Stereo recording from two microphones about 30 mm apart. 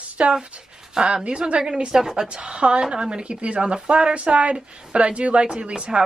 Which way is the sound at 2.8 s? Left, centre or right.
Right.